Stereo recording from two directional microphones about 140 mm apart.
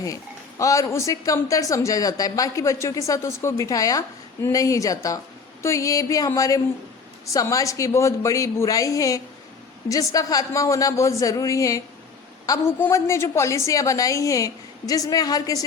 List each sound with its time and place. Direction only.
0.6 s a woman's voice: 25° left (ahead or behind)